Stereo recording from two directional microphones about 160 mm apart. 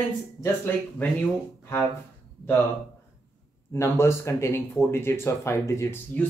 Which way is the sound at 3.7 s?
15° left (ahead or behind).